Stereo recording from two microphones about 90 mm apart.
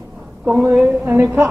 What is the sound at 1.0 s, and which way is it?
Speech, 20° right (ahead or behind).